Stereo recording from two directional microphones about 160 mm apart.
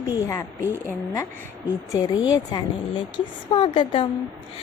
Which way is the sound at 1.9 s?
25° left (ahead or behind).